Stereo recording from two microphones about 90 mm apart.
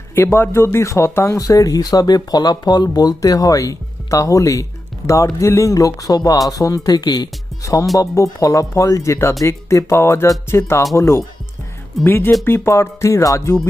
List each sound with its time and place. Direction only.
0.1 s speech: 25° left (ahead or behind)